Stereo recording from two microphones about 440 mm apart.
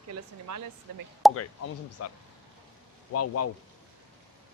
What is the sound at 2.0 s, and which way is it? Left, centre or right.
Speech, left.